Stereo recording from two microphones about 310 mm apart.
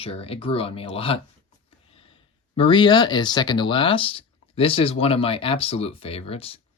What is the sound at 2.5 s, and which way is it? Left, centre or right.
Speech, centre.